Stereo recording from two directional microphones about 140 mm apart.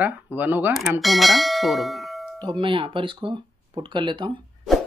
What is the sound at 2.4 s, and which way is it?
Speech, 35° right (ahead or behind).